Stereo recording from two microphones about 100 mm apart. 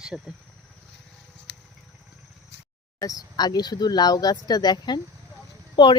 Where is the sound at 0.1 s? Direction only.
5° right (ahead or behind).